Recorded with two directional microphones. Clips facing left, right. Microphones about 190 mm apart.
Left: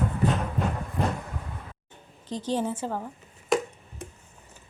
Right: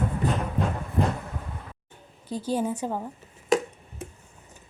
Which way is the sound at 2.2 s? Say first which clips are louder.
Right 1 dB; 10° right (ahead or behind).